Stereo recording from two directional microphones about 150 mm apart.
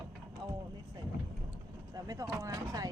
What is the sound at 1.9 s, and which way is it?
Speech, 20° right (ahead or behind).